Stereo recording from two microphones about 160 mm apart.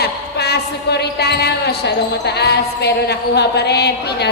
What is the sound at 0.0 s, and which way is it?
Speech, 90° left.